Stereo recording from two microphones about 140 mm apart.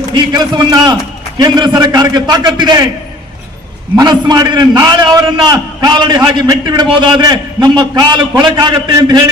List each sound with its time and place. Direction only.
0.1 s a man's voice: 30° right (ahead or behind)
3.9 s a man's voice: 30° right (ahead or behind)